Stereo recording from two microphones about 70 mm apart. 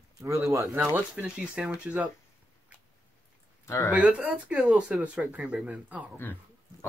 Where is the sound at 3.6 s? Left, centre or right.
Left.